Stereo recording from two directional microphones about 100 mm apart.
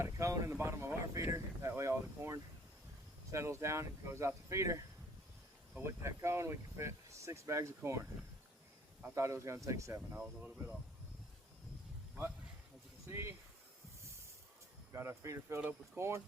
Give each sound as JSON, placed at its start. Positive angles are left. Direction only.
{"t": 0.0, "sound": "a sound", "side_deg": -30}
{"t": 3.3, "sound": "speech", "side_deg": -30}
{"t": 5.8, "sound": "speech", "side_deg": -30}
{"t": 9.1, "sound": "speech", "side_deg": -30}
{"t": 10.2, "sound": "speech", "side_deg": -15}
{"t": 13.1, "sound": "speech", "side_deg": -25}
{"t": 14.9, "sound": "speech", "side_deg": -25}